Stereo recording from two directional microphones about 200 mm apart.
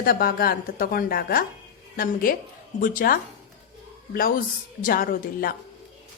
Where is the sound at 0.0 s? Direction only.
45° left (ahead or behind).